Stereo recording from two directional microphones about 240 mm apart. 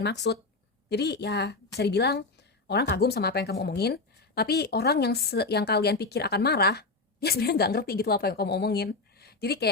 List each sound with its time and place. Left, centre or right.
0.0 s a woman's voice: left